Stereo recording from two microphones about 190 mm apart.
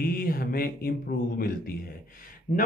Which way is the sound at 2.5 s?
40° left (ahead or behind).